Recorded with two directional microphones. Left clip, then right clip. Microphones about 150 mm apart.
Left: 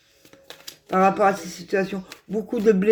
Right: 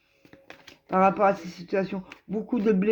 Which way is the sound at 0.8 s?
45° right (ahead or behind).